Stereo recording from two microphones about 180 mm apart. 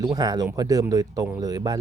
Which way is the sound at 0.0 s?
20° right (ahead or behind).